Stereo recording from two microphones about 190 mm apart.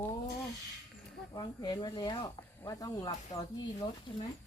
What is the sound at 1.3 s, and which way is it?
Speech, 20° left (ahead or behind).